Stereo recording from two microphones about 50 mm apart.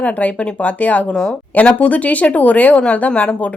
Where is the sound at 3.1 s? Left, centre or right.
Centre.